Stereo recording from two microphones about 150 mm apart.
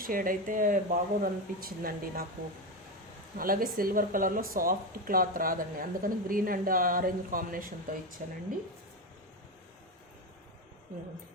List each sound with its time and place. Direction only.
0.0 s speech: 70° right (ahead or behind)
3.3 s speech: 70° right (ahead or behind)